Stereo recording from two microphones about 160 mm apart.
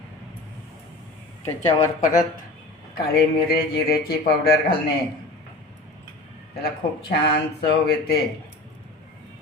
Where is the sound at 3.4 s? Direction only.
75° left (ahead or behind).